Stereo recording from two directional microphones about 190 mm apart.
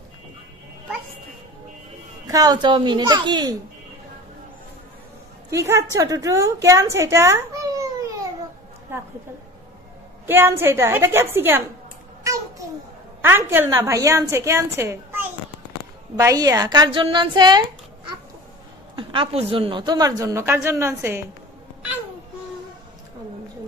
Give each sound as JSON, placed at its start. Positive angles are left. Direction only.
{"t": 2.2, "sound": "a woman's voice", "side_deg": -20}
{"t": 5.5, "sound": "a child's voice", "side_deg": -15}
{"t": 8.9, "sound": "a woman's voice", "side_deg": -10}
{"t": 10.2, "sound": "a child's voice", "side_deg": -10}
{"t": 12.2, "sound": "a sound", "side_deg": -15}
{"t": 13.5, "sound": "a child's voice", "side_deg": -15}
{"t": 18.9, "sound": "a woman's voice", "side_deg": -30}